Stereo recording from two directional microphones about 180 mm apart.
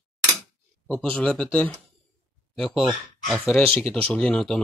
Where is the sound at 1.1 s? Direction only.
5° left (ahead or behind).